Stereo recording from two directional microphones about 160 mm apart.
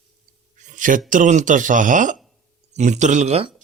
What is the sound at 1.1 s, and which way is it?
Speech, 55° right (ahead or behind).